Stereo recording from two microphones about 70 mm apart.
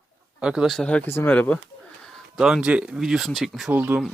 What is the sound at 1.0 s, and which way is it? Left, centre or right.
Speech, left.